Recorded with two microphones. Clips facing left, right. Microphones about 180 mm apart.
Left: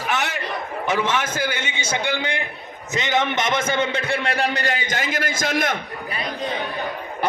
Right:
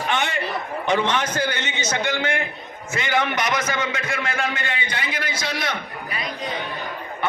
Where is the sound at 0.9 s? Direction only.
5° left (ahead or behind); by 5.7 s 50° left (ahead or behind).